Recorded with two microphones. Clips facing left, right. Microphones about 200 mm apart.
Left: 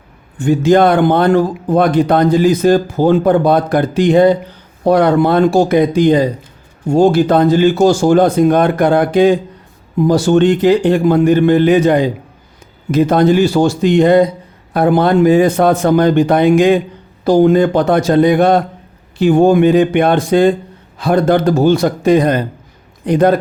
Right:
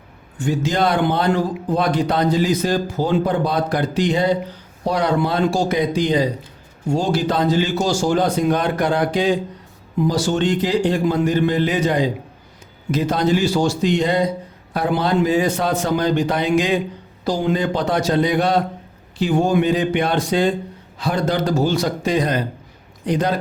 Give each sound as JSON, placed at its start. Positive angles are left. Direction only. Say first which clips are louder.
{"t": 0.3, "sound": "a man's voice", "louder": "left 10 dB", "side_deg": 55}